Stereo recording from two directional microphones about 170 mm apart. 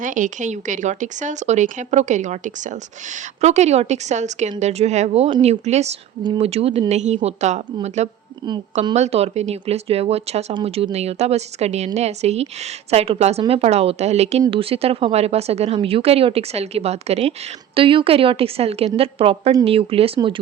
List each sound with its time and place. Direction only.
0.0 s speech: 50° right (ahead or behind); by 20.4 s 30° right (ahead or behind)